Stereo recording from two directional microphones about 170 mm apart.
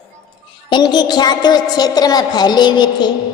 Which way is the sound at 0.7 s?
25° left (ahead or behind).